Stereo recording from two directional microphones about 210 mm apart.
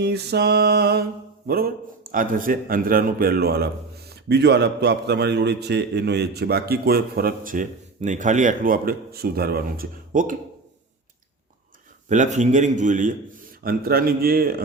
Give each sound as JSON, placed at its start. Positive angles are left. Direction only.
{"t": 0.0, "sound": "a man's voice", "side_deg": -50}
{"t": 12.0, "sound": "a man's voice", "side_deg": -35}